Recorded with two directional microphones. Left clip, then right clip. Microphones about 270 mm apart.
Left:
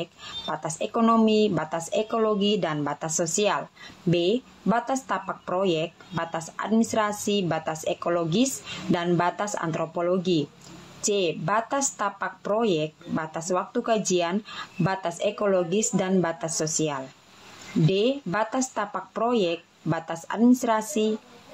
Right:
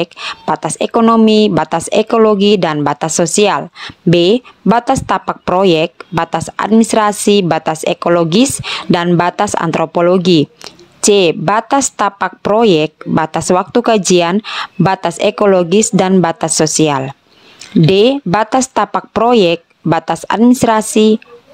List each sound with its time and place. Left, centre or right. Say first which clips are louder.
0.0 s speech: right 15 dB; right